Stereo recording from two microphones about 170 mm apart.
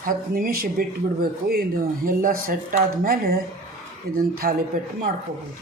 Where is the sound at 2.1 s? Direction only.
55° right (ahead or behind).